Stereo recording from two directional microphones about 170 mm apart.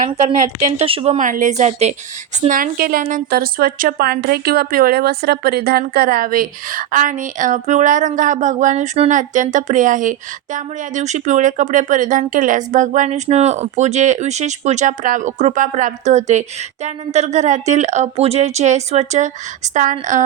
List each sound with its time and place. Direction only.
0.3 s a woman's voice: 35° right (ahead or behind)
1.2 s speech: 50° right (ahead or behind)
2.5 s speech: 60° right (ahead or behind)